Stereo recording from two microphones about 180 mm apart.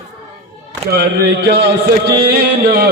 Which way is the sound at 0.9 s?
60° right (ahead or behind).